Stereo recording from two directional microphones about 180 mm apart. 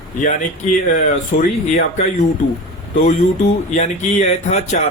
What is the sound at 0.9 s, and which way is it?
Speech, 45° left (ahead or behind).